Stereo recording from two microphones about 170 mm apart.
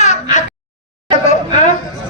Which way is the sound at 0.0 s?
45° left (ahead or behind).